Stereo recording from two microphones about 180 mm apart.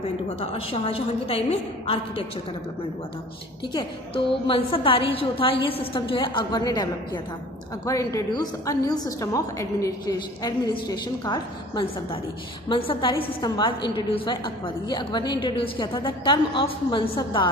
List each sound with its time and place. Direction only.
0.4 s a woman's voice: 35° left (ahead or behind)
3.7 s a woman's voice: 30° left (ahead or behind)